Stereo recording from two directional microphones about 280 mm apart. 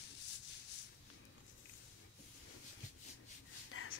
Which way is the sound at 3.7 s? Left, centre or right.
Left.